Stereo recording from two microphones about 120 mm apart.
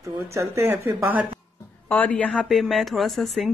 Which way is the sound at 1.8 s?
15° left (ahead or behind).